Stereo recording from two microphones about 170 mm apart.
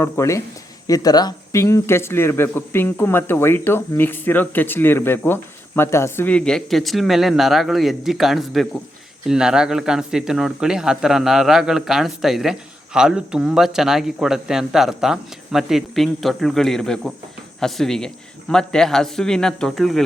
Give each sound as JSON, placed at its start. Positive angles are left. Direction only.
{"t": 0.0, "sound": "speech", "side_deg": 15}